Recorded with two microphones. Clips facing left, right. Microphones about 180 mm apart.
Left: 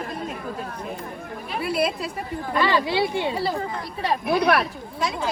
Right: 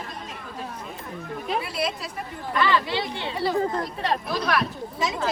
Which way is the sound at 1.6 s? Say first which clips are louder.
Left 6 dB; 60° left (ahead or behind).